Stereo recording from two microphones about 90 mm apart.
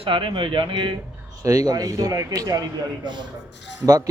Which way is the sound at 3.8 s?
40° right (ahead or behind).